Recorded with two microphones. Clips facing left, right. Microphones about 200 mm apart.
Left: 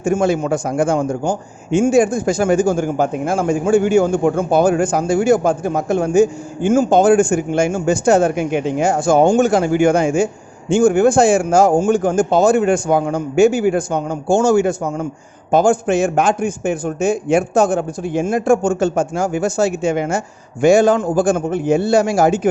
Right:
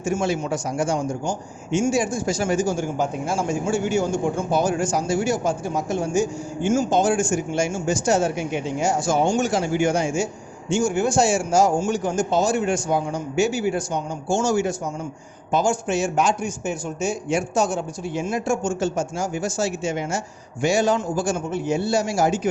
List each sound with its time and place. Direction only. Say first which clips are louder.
0.0 s a man's voice: left 7 dB; 55° left (ahead or behind)